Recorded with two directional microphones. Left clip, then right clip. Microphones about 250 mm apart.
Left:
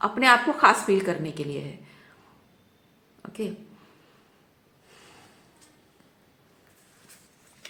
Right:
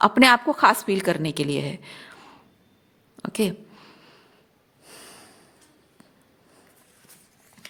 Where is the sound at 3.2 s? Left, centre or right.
Right.